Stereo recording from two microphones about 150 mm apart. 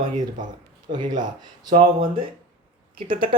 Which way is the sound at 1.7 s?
35° right (ahead or behind).